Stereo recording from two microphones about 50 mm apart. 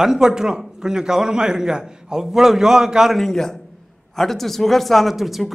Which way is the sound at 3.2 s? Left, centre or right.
Centre.